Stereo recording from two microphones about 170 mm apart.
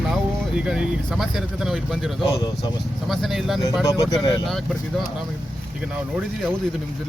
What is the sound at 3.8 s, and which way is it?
Speech, 20° left (ahead or behind).